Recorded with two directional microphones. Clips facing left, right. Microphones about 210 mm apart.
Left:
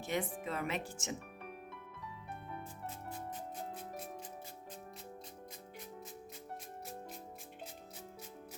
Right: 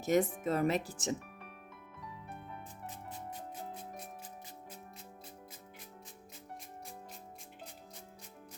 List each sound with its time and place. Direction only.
0.0 s speech: 45° right (ahead or behind)